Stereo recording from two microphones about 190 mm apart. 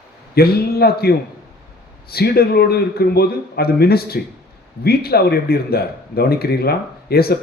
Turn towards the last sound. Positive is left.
turn(degrees=55)  # may be behind; listen again after turning